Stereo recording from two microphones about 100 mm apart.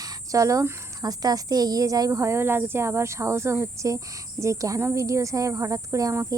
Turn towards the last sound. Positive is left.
turn(degrees=-35)  # may be behind; listen again after turning